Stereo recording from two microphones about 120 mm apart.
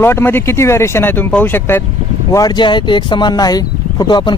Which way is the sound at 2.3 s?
35° left (ahead or behind).